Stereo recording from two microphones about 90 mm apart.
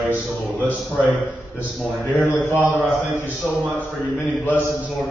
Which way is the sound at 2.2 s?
15° right (ahead or behind).